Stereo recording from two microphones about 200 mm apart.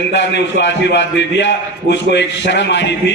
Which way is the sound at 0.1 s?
65° left (ahead or behind).